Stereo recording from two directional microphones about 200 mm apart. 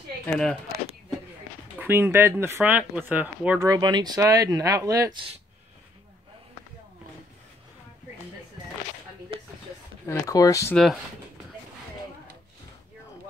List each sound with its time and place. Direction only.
0.3 s speech: centre (ahead or behind)
1.8 s speech: 10° right (ahead or behind)
10.0 s speech: 15° left (ahead or behind)